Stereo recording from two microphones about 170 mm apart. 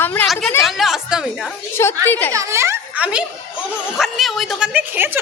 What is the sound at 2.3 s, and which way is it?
A woman's voice, 15° right (ahead or behind).